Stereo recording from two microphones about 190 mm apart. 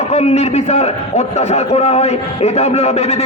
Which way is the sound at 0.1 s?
35° left (ahead or behind).